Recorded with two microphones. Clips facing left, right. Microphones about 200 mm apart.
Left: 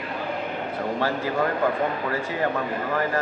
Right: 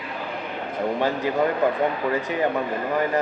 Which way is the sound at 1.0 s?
20° right (ahead or behind).